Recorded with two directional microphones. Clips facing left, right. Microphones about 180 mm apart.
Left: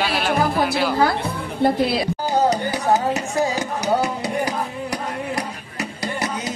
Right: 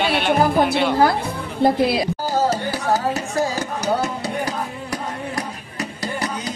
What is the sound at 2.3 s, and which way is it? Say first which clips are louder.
Speech: left 3 dB; 20° left (ahead or behind).